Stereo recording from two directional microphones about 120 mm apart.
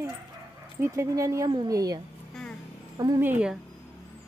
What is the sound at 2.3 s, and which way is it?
Music, 5° left (ahead or behind).